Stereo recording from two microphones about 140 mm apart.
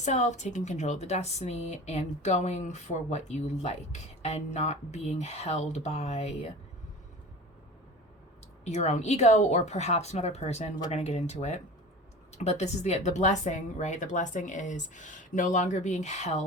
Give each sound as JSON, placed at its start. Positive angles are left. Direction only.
{"t": 0.0, "sound": "a woman's voice", "side_deg": 55}
{"t": 8.6, "sound": "a woman's voice", "side_deg": 55}